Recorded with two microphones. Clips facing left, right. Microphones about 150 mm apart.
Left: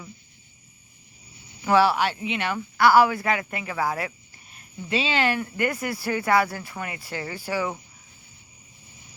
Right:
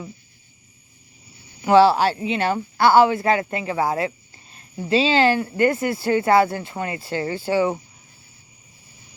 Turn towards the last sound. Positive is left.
turn(degrees=-25)  # may be behind; listen again after turning